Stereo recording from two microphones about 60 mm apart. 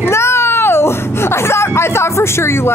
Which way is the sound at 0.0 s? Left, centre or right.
Left.